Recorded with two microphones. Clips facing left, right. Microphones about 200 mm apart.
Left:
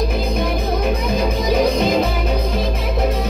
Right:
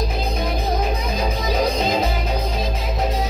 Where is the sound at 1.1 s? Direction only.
60° left (ahead or behind).